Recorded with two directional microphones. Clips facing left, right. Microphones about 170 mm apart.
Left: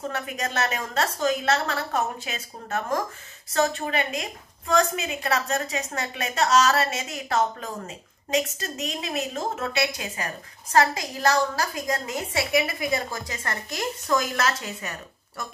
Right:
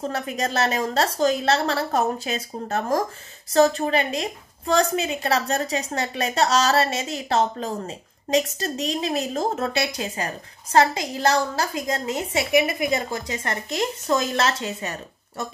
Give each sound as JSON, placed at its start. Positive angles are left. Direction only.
{"t": 0.1, "sound": "a woman's voice", "side_deg": -35}